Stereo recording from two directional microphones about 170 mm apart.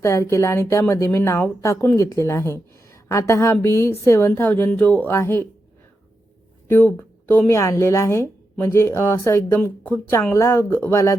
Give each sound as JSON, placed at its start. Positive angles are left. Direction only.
{"t": 0.0, "sound": "a woman's voice", "side_deg": 15}
{"t": 6.7, "sound": "a woman's voice", "side_deg": 10}